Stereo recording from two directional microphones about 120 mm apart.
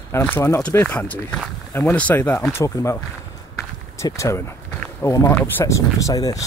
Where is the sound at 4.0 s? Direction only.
25° left (ahead or behind).